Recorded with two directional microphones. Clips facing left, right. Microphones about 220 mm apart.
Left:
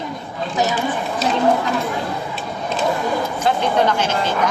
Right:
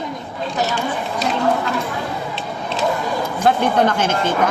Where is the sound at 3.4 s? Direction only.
50° right (ahead or behind).